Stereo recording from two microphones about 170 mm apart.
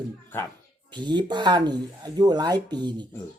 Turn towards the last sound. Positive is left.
turn(degrees=-25)  # may be behind; listen again after turning